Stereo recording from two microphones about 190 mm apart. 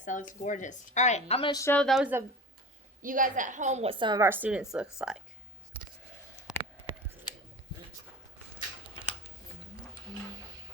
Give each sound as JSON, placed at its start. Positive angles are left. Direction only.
{"t": 0.0, "sound": "a woman's voice", "side_deg": 40}
{"t": 1.6, "sound": "a woman's voice", "side_deg": 5}
{"t": 3.0, "sound": "a woman's voice", "side_deg": -45}
{"t": 6.5, "sound": "a sound", "side_deg": -5}
{"t": 9.0, "sound": "scissors", "side_deg": 25}
{"t": 10.1, "sound": "music", "side_deg": -20}